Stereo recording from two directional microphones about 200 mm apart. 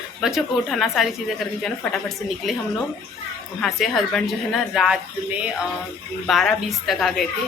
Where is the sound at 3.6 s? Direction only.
Centre (ahead or behind).